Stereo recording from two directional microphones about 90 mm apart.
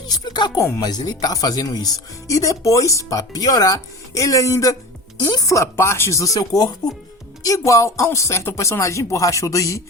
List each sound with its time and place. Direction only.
0.3 s speech: 50° left (ahead or behind)